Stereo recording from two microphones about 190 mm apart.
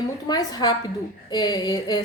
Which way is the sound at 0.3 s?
20° left (ahead or behind).